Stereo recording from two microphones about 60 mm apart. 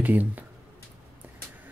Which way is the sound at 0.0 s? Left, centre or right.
Right.